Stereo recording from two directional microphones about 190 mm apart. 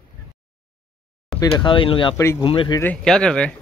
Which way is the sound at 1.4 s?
25° left (ahead or behind).